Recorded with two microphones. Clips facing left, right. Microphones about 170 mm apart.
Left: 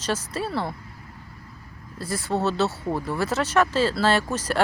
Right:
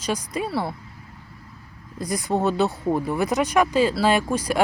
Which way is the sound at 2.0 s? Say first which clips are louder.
Right 2 dB; 15° right (ahead or behind).